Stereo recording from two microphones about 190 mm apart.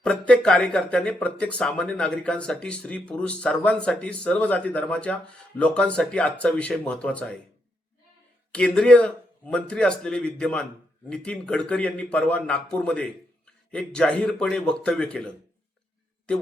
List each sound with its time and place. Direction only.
0.0 s speech: 5° left (ahead or behind)
8.5 s speech: 5° left (ahead or behind)
16.3 s speech: 5° left (ahead or behind)